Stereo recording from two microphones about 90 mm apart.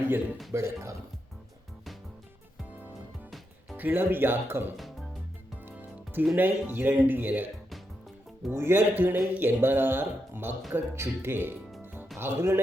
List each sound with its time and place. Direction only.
0.5 s a man's voice: 30° right (ahead or behind)
3.8 s a man's voice: 20° right (ahead or behind)
6.3 s a man's voice: 20° right (ahead or behind)
8.4 s a man's voice: 25° right (ahead or behind)